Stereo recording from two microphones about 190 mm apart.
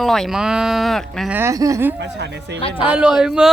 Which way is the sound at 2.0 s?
65° right (ahead or behind).